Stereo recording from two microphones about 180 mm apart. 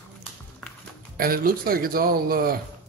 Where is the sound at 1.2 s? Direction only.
55° right (ahead or behind).